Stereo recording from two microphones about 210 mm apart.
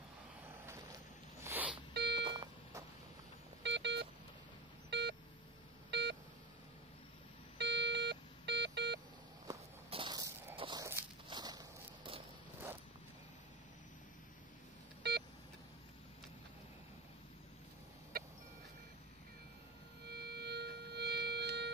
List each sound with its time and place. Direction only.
1.4 s a sound: 10° right (ahead or behind)
2.0 s alarm clock: 55° right (ahead or behind)
2.2 s beep: 20° right (ahead or behind)
3.6 s vehicle: 55° right (ahead or behind)
4.9 s beep: 55° right (ahead or behind)
7.5 s beep: 55° right (ahead or behind)
9.8 s walk: 25° right (ahead or behind)
18.1 s a sound: 45° right (ahead or behind)
20.1 s music: 50° right (ahead or behind)